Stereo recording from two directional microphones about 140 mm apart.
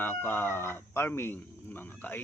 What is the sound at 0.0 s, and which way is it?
Speech, 15° left (ahead or behind).